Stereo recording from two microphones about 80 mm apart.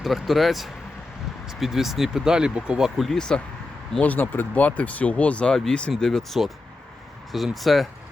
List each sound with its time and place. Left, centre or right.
0.0 s speech: centre
3.1 s speech: centre
4.0 s speech: left; by 7.9 s centre